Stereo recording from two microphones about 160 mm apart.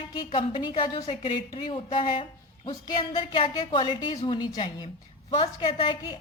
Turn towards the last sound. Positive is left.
turn(degrees=30)  # may be behind; listen again after turning